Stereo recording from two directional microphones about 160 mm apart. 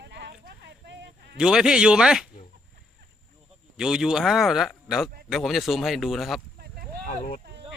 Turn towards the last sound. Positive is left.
turn(degrees=50)  # may be behind; listen again after turning